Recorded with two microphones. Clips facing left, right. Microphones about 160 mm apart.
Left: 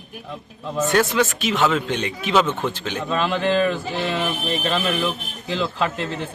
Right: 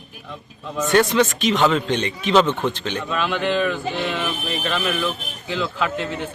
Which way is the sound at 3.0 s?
35° left (ahead or behind).